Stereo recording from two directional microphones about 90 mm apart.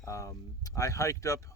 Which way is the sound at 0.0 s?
35° left (ahead or behind).